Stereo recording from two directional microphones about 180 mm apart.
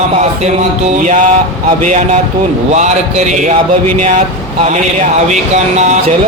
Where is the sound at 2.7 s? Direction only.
40° right (ahead or behind).